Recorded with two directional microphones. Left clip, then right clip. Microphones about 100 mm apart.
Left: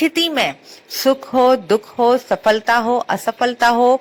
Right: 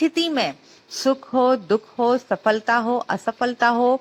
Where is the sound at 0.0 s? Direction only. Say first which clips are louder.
Left 4 dB; 20° left (ahead or behind).